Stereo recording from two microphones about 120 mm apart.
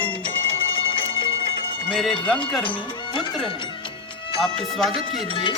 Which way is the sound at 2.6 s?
45° left (ahead or behind).